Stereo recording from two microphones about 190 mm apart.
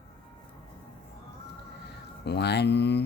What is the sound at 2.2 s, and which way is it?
Speech, 60° left (ahead or behind).